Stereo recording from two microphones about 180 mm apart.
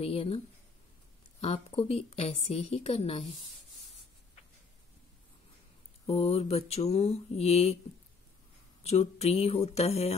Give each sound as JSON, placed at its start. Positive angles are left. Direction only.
{"t": 0.0, "sound": "a woman's voice", "side_deg": 30}
{"t": 1.4, "sound": "a woman's voice", "side_deg": 35}
{"t": 6.0, "sound": "a woman's voice", "side_deg": 35}
{"t": 8.8, "sound": "a woman's voice", "side_deg": 35}